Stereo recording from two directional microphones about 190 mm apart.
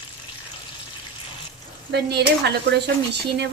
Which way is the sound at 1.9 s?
60° right (ahead or behind).